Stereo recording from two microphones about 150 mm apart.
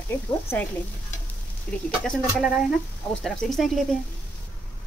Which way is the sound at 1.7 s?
5° left (ahead or behind).